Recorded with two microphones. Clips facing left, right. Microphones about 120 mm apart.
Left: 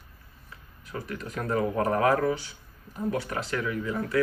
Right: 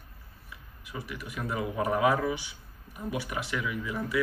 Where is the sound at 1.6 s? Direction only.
10° right (ahead or behind).